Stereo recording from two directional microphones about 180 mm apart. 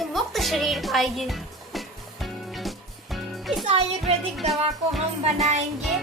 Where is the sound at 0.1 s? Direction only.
Centre (ahead or behind).